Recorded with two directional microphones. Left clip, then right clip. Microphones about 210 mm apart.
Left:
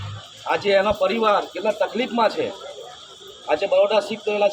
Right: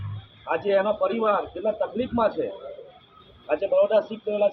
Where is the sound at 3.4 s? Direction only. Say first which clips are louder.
Left 3 dB; 35° left (ahead or behind).